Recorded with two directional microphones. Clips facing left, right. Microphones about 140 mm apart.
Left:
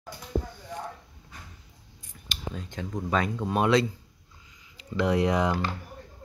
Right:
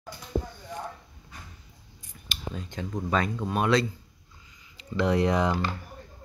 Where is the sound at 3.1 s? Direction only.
10° left (ahead or behind).